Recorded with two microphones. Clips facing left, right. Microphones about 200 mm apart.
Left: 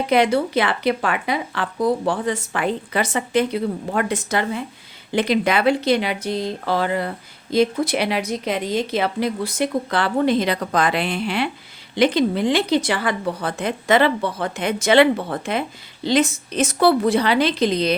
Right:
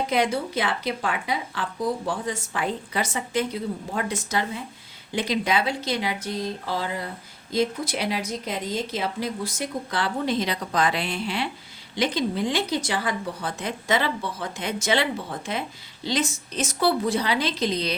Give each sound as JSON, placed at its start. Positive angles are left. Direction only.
{"t": 0.1, "sound": "a woman's voice", "side_deg": 65}